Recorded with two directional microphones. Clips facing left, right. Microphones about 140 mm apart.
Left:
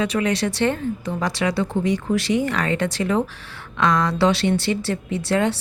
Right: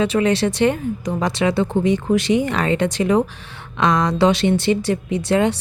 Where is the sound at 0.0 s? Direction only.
25° right (ahead or behind).